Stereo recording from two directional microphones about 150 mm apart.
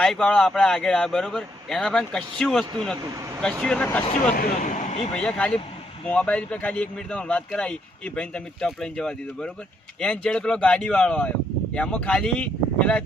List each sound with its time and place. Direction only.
0.0 s speech: 5° left (ahead or behind)
4.3 s speech: 65° left (ahead or behind); by 5.1 s 50° left (ahead or behind)
5.1 s speech: 5° left (ahead or behind)